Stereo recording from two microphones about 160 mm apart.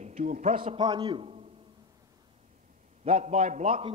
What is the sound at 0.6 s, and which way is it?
Speech, 30° right (ahead or behind).